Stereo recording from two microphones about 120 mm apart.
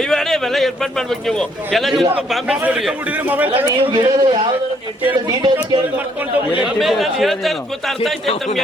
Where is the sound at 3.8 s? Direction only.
45° right (ahead or behind).